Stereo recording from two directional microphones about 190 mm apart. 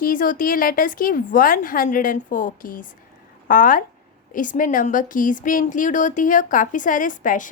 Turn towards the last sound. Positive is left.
turn(degrees=45)  # may be behind; listen again after turning